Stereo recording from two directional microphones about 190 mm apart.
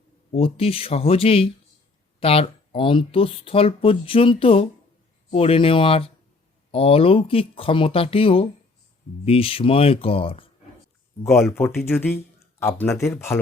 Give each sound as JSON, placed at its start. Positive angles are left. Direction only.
{"t": 0.3, "sound": "speech", "side_deg": 30}
{"t": 11.8, "sound": "speech", "side_deg": 10}